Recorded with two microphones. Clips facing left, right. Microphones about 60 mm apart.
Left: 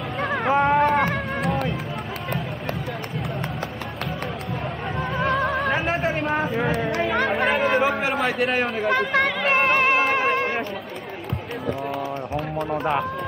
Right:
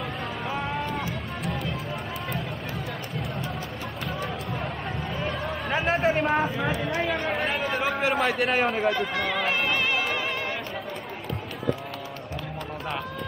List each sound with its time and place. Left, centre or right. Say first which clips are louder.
0.2 s a sound: left 14 dB; left
0.6 s music: left 14 dB; left
5.1 s music: left 10 dB; left
6.1 s a sound: even; centre
7.2 s chatter: left 6 dB; left
7.8 s a sound: left 3 dB; centre
8.8 s speech: left 5 dB; left
9.5 s music: left 7 dB; left
12.5 s fowl: left 10 dB; left